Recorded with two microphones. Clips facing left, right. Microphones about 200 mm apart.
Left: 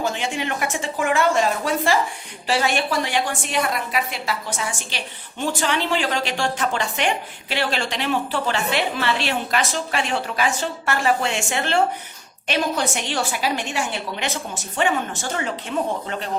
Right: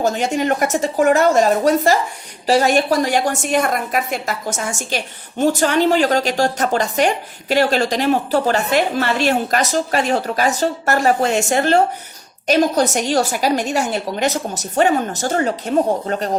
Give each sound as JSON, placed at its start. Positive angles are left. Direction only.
{"t": 0.0, "sound": "a woman's voice", "side_deg": -40}